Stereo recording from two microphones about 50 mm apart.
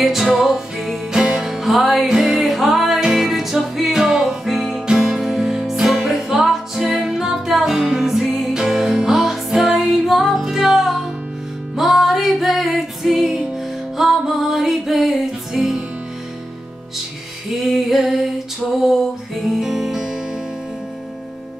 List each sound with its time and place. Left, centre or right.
0.0 s music: centre
17.6 s music: centre